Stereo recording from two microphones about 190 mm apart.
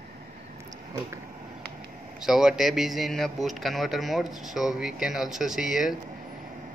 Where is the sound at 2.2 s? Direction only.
5° right (ahead or behind).